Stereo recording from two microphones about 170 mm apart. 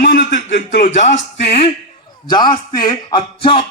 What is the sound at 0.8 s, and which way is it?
Speech, 45° left (ahead or behind).